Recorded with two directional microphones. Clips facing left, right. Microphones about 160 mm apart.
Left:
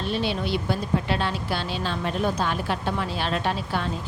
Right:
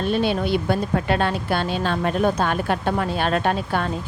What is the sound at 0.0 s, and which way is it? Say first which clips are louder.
A woman's voice: right 5 dB; 50° right (ahead or behind).